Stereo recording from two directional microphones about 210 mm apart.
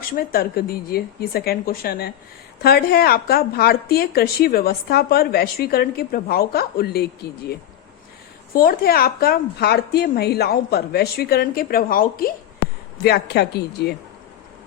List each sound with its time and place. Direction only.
0.2 s speech: 45° left (ahead or behind)
8.5 s speech: 45° left (ahead or behind)